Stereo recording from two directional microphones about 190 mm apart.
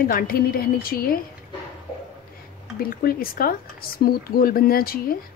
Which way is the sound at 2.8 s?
50° left (ahead or behind).